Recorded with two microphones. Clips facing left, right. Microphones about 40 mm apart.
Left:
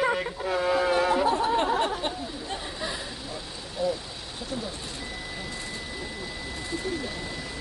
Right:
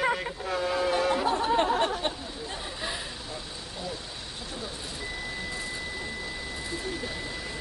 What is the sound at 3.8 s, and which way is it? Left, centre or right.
Vehicle, centre.